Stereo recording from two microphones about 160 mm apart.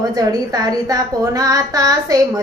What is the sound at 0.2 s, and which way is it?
A woman's voice, 25° right (ahead or behind).